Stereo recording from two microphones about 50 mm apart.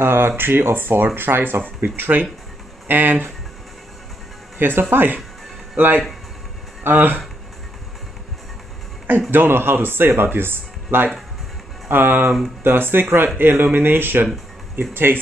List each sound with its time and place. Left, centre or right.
0.0 s speech: right
4.6 s speech: right
9.3 s speech: right